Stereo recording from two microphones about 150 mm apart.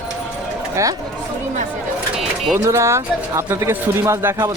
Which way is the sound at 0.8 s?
20° right (ahead or behind).